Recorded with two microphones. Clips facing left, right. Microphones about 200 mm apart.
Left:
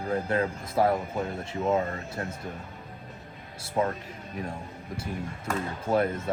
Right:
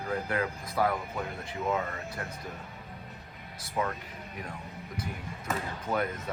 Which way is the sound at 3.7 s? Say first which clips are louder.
Left 5 dB; 30° left (ahead or behind).